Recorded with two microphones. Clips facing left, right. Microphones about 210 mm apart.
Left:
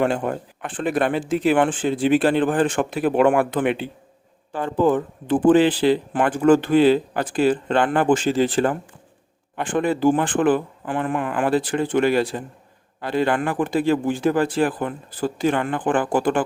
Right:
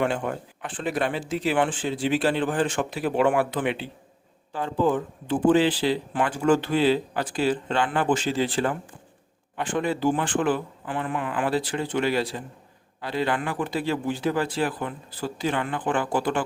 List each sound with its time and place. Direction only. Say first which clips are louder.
0.0 s speech: left 4 dB; 40° left (ahead or behind)